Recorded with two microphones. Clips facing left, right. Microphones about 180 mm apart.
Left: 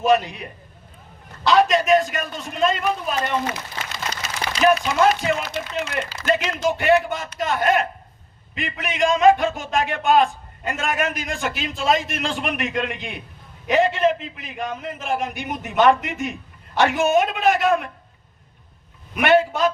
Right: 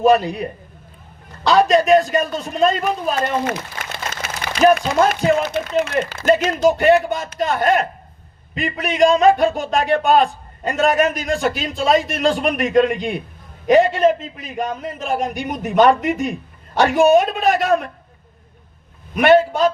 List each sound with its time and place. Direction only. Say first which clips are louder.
0.0 s a man's voice: right 4 dB; 35° right (ahead or behind)
1.5 s a man's voice: right 3 dB; 35° right (ahead or behind)
3.9 s a sound: right 1 dB; 55° right (ahead or behind)
5.5 s a woman's voice: right 7 dB; 55° right (ahead or behind)
5.9 s a man's voice: right 4 dB; 40° right (ahead or behind)
19.1 s a man's voice: right 4 dB; 40° right (ahead or behind)